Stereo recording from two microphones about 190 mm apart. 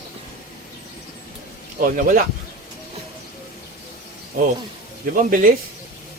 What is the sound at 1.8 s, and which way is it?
Speech, 45° right (ahead or behind).